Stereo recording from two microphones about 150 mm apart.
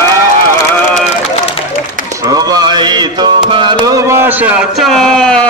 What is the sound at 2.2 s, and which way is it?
Mantra, 25° right (ahead or behind).